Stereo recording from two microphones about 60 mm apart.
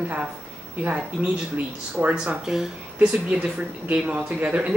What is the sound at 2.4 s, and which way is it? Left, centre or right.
Speech, centre.